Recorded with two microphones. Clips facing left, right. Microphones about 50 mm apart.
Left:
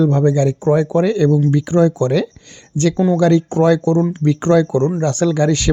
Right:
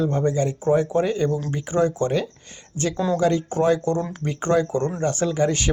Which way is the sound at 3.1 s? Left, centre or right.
Left.